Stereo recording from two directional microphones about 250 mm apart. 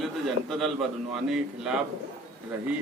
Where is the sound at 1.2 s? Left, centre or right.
Centre.